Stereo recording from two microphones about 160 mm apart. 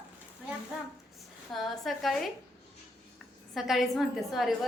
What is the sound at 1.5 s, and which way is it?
Speech, centre (ahead or behind).